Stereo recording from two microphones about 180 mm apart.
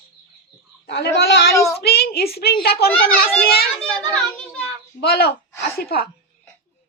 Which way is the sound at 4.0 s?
5° left (ahead or behind).